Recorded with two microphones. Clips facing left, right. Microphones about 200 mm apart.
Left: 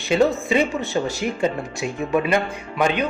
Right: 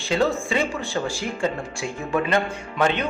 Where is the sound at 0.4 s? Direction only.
20° left (ahead or behind).